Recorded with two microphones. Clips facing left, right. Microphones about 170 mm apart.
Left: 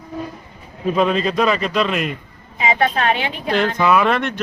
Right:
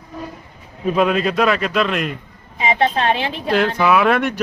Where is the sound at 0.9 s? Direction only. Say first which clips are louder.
Right 1 dB; 5° right (ahead or behind).